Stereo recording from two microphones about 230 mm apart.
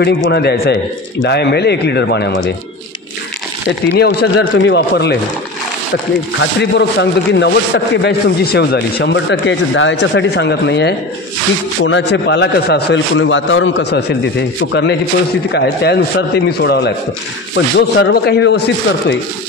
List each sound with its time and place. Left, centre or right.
0.3 s a man's voice: left
3.9 s a man's voice: left
6.6 s a man's voice: left